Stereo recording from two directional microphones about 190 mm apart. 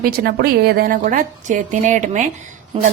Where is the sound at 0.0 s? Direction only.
55° right (ahead or behind).